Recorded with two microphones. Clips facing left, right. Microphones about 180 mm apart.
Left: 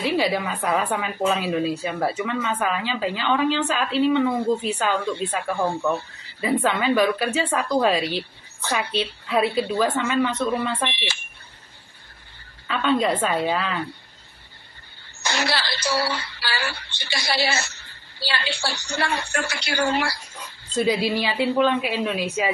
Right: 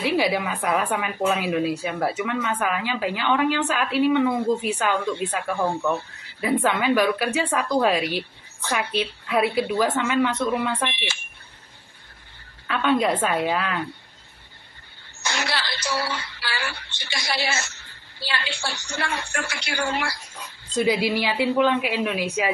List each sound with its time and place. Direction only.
0.0 s speech: 15° right (ahead or behind)
6.4 s speech: 10° right (ahead or behind)
12.6 s speech: 10° right (ahead or behind)
15.2 s a woman's voice: 35° left (ahead or behind)
20.7 s speech: 15° right (ahead or behind)